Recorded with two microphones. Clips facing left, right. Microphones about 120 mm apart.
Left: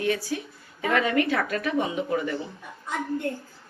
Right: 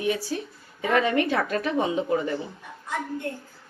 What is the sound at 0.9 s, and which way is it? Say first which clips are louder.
A woman's voice: right 1 dB; 30° right (ahead or behind).